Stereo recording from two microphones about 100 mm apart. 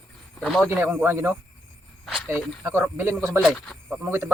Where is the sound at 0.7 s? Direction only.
20° right (ahead or behind).